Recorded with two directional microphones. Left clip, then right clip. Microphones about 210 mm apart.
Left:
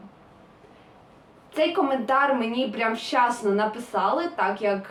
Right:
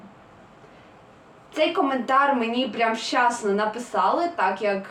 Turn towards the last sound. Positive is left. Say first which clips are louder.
# right 2 dB
turn(degrees=5)  # may be behind; listen again after turning